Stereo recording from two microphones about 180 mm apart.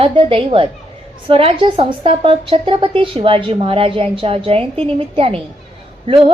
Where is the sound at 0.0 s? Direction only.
30° right (ahead or behind).